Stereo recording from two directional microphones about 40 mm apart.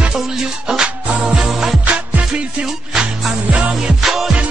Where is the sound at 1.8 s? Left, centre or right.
Right.